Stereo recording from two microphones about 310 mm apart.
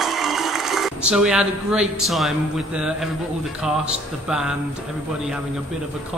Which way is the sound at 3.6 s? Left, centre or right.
Centre.